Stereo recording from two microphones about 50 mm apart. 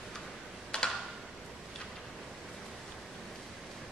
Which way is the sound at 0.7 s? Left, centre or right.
Centre.